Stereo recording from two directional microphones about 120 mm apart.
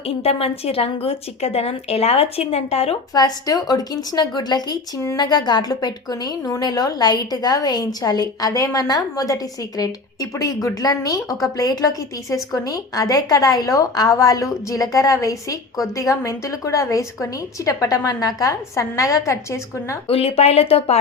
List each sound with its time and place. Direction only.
0.2 s a woman's voice: 55° left (ahead or behind)
3.2 s a woman's voice: 30° left (ahead or behind)
20.1 s a woman's voice: 55° left (ahead or behind)